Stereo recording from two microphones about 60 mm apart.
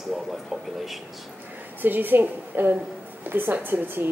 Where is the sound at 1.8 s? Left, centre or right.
Right.